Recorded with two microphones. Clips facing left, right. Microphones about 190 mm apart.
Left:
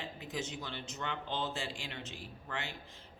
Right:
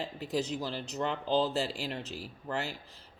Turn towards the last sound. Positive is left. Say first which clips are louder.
# right 6 dB
turn(degrees=-40)  # may be behind; listen again after turning